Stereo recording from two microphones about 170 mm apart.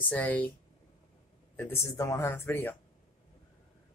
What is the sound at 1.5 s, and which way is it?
Speech, 15° left (ahead or behind).